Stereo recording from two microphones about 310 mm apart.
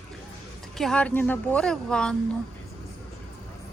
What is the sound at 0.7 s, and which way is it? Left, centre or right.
Speech, centre.